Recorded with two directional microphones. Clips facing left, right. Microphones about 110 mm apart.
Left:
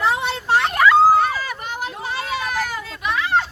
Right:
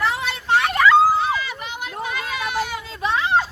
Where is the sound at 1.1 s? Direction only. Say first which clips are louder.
Left 3 dB; 40° left (ahead or behind).